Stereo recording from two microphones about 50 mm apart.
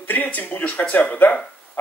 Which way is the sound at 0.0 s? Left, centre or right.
Left.